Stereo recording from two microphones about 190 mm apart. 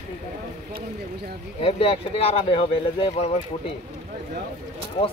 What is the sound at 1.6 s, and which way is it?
Speech, 30° left (ahead or behind).